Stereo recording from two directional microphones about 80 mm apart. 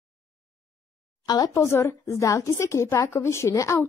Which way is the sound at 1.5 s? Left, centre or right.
Left.